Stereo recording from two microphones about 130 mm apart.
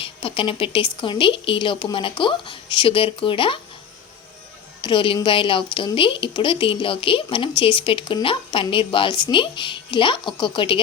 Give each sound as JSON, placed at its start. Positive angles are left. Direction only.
{"t": 0.0, "sound": "speech", "side_deg": 45}
{"t": 4.8, "sound": "speech", "side_deg": 40}